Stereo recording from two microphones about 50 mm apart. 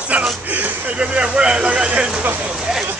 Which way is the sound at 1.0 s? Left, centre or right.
Right.